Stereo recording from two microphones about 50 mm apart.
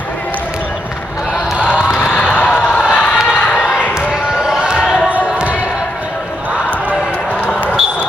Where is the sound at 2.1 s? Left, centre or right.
Left.